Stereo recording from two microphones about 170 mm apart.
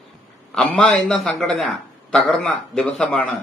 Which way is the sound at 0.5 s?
5° left (ahead or behind).